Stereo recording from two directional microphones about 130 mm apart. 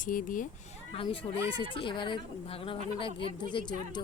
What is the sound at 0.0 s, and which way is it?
Speech, 90° left.